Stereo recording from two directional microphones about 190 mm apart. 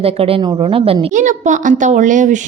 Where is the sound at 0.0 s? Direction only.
30° right (ahead or behind).